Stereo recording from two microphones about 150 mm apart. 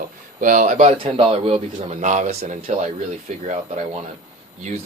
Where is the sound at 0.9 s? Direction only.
35° right (ahead or behind).